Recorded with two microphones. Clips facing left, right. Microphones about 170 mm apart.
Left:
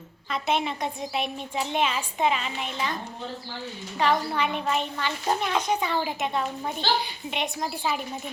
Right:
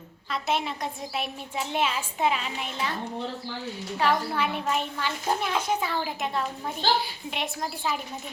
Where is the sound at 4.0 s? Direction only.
5° right (ahead or behind).